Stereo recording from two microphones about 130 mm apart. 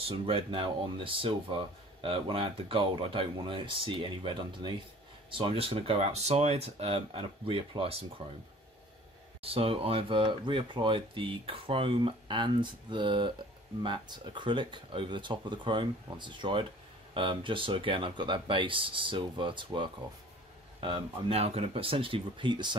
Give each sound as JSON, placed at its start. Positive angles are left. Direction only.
{"t": 0.0, "sound": "speech", "side_deg": -45}
{"t": 9.4, "sound": "speech", "side_deg": -45}